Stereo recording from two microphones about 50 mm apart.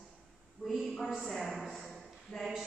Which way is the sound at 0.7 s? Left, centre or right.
Centre.